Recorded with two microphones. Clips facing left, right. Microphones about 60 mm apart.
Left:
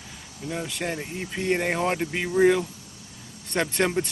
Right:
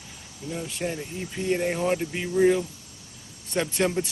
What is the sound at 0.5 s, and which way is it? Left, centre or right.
Speech, left.